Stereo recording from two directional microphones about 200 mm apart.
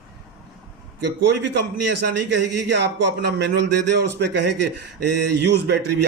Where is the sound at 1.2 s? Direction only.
60° right (ahead or behind).